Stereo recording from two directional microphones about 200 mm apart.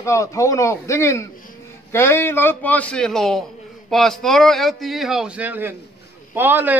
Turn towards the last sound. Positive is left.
turn(degrees=-10)  # may be behind; listen again after turning